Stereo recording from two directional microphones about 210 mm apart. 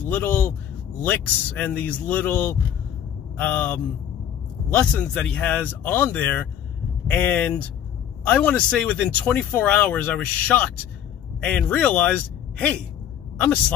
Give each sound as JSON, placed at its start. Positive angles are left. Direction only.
{"t": 0.0, "sound": "speech", "side_deg": 10}